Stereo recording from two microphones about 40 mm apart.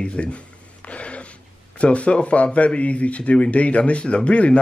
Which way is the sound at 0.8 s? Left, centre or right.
Left.